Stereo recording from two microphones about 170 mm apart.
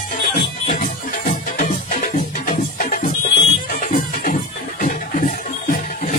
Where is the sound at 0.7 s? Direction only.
50° left (ahead or behind).